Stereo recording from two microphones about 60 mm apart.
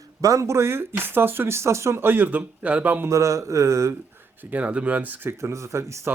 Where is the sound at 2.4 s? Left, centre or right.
Right.